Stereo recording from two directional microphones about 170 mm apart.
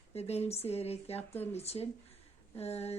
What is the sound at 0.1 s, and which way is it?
A woman's voice, 35° left (ahead or behind).